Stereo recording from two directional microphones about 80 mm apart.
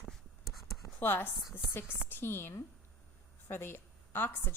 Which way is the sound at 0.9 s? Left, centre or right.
Left.